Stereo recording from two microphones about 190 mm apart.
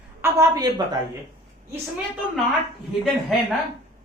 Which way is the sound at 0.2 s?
15° right (ahead or behind).